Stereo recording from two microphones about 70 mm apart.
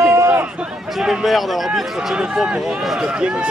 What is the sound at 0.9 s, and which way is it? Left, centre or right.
A man's voice, centre.